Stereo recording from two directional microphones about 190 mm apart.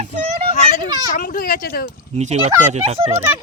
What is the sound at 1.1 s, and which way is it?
Speech, 45° left (ahead or behind).